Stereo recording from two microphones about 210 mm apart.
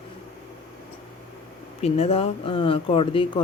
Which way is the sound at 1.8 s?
30° left (ahead or behind).